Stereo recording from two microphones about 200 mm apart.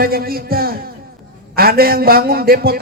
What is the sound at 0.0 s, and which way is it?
A man's voice, 50° right (ahead or behind).